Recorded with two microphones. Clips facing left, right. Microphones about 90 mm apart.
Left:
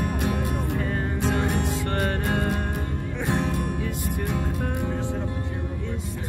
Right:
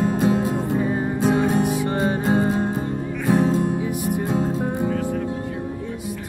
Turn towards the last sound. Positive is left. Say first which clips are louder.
# right 6 dB
turn(degrees=-25)  # may be behind; listen again after turning